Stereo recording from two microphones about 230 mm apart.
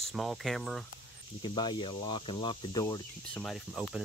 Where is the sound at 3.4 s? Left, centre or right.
Centre.